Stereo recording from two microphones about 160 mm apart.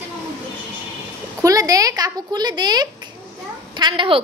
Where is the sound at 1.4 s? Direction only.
20° right (ahead or behind).